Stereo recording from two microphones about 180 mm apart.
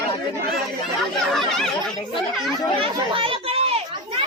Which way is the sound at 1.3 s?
Centre (ahead or behind).